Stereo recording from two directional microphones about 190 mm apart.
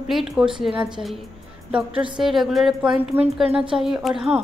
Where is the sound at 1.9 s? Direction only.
25° right (ahead or behind).